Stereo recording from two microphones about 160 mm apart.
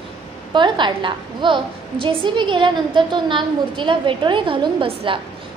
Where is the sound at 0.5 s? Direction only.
30° right (ahead or behind).